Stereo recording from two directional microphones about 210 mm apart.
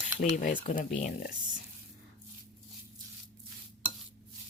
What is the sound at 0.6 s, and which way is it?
Speech, 35° left (ahead or behind).